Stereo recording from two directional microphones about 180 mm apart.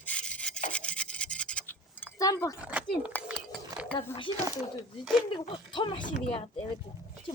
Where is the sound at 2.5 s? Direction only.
10° right (ahead or behind).